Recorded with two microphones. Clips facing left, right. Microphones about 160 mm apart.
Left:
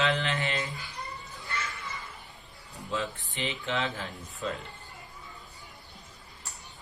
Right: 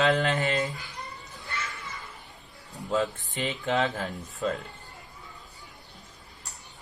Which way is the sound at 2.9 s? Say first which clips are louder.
Right 6 dB; 40° right (ahead or behind).